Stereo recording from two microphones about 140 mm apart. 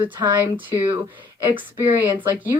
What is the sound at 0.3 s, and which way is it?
Speech, 15° right (ahead or behind).